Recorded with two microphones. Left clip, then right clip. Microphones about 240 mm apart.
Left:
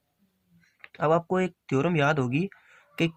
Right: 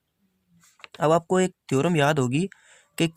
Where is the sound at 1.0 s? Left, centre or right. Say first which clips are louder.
Right 3 dB; right.